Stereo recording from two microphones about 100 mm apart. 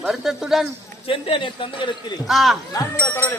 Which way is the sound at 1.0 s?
65° left (ahead or behind).